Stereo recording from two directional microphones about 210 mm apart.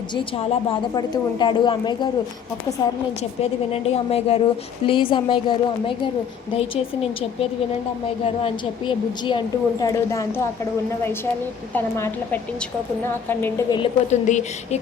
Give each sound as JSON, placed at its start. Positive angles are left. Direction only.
{"t": 0.1, "sound": "a woman's voice", "side_deg": 25}
{"t": 3.4, "sound": "a woman's voice", "side_deg": 30}
{"t": 8.4, "sound": "a woman's voice", "side_deg": 25}
{"t": 11.7, "sound": "a woman's voice", "side_deg": 10}
{"t": 13.4, "sound": "a woman's voice", "side_deg": 20}